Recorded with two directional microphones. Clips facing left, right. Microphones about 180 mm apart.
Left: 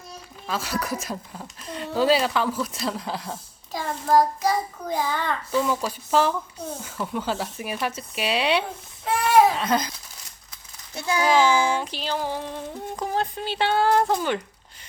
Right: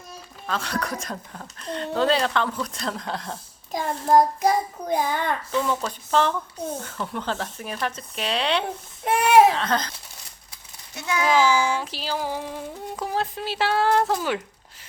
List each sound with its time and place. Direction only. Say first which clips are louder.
0.4 s speech: even; 5° left (ahead or behind)
3.7 s a sound: right 2 dB; 20° right (ahead or behind)
4.4 s child singing: right 2 dB; 55° right (ahead or behind)
4.9 s a sound: right 1 dB; 20° right (ahead or behind)
5.5 s speech: left 5 dB; 5° left (ahead or behind)
10.9 s a child's voice: left 1 dB; 35° left (ahead or behind)
11.8 s speech: left 1 dB; centre (ahead or behind)